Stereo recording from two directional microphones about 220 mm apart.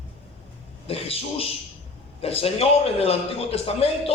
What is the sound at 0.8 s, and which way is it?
A man's voice, 25° left (ahead or behind).